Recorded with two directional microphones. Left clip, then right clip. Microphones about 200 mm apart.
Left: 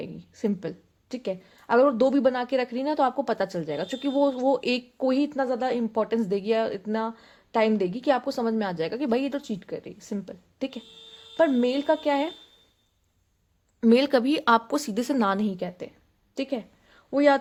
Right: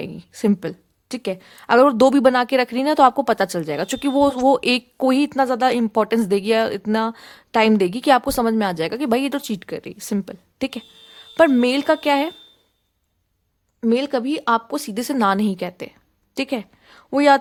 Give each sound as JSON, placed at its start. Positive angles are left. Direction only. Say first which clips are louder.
{"t": 0.0, "sound": "a woman's voice", "louder": "right 7 dB", "side_deg": -30}
{"t": 9.3, "sound": "a woman's voice", "louder": "right 6 dB", "side_deg": -40}
{"t": 13.8, "sound": "a woman's voice", "louder": "even", "side_deg": -5}
{"t": 16.3, "sound": "a sound", "louder": "right 6 dB", "side_deg": -30}